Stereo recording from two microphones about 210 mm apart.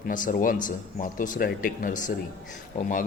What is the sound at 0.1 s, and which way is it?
Speech, 40° left (ahead or behind).